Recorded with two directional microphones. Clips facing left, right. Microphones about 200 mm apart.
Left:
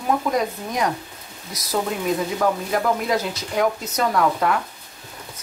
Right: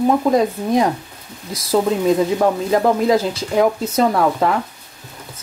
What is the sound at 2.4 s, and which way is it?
Speech, 25° right (ahead or behind).